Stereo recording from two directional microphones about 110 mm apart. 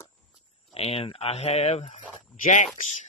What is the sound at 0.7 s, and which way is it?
Speech, 65° left (ahead or behind).